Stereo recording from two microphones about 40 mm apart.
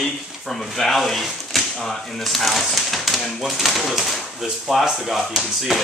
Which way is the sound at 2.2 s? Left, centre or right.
Centre.